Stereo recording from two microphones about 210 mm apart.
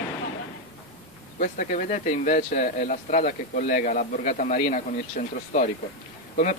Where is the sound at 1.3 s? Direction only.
40° left (ahead or behind).